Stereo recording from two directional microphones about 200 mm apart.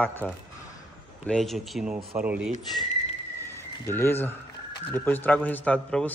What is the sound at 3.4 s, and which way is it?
Music, 10° left (ahead or behind).